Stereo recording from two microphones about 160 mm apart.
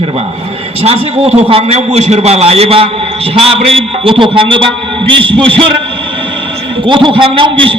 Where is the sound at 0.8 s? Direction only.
40° right (ahead or behind).